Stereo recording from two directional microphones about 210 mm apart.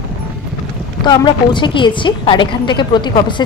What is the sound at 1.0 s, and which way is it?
Speech, 20° left (ahead or behind).